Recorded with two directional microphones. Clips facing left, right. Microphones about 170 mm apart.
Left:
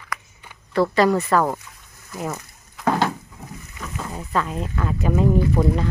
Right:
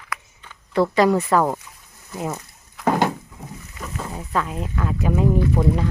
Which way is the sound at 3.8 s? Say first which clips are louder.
Even; 5° right (ahead or behind).